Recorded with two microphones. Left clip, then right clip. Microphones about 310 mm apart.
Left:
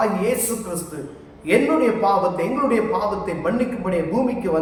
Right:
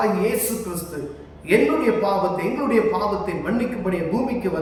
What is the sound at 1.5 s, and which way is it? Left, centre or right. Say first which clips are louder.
A man's voice: left 1 dB; centre.